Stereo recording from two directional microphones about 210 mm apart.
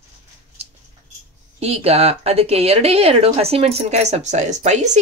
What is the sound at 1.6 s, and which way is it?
A woman's voice, 30° right (ahead or behind).